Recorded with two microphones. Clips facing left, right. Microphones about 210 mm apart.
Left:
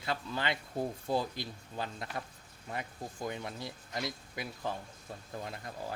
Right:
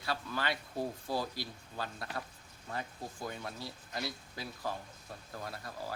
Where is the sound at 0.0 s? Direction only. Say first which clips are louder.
Left 1 dB; 20° left (ahead or behind).